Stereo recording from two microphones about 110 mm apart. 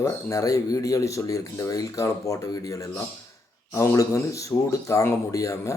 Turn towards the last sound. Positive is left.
turn(degrees=30)  # may be behind; listen again after turning